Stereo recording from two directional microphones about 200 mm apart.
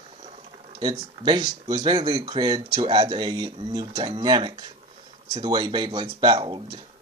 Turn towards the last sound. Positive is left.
turn(degrees=-25)  # may be behind; listen again after turning